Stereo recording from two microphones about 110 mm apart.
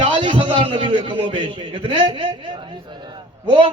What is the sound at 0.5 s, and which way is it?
Speech, 90° right.